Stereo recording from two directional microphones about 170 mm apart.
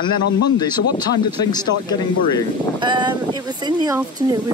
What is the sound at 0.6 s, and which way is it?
Speech, 25° left (ahead or behind).